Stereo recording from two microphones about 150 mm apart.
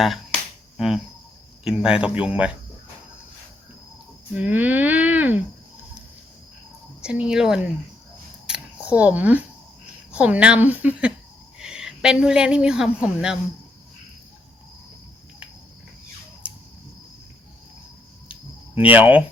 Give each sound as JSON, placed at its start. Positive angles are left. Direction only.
{"t": 0.8, "sound": "a woman's voice", "side_deg": 0}
{"t": 4.4, "sound": "speech", "side_deg": -10}
{"t": 7.0, "sound": "speech", "side_deg": -5}
{"t": 8.4, "sound": "a sound", "side_deg": -5}
{"t": 10.1, "sound": "a woman's voice", "side_deg": -10}
{"t": 18.3, "sound": "cricket", "side_deg": 35}
{"t": 18.9, "sound": "a woman's voice", "side_deg": -10}